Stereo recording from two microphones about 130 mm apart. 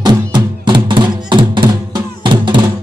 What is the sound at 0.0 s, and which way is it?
Music, 35° right (ahead or behind).